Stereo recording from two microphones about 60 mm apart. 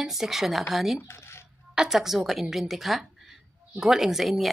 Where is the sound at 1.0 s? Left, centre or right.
Left.